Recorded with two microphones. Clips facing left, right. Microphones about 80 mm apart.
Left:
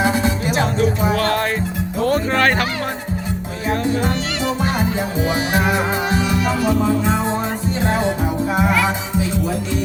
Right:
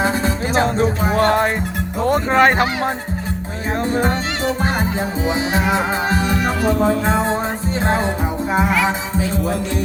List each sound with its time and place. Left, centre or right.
0.0 s music: right
2.0 s speech: right
3.8 s music: right